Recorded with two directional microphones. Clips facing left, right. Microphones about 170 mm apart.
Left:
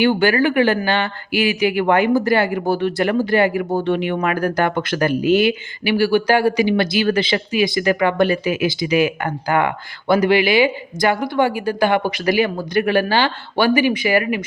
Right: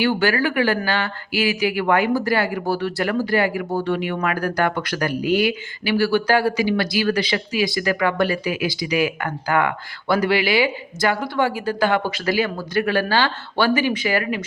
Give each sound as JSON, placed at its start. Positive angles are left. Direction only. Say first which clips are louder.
{"t": 0.0, "sound": "speech", "louder": "left 4 dB", "side_deg": 20}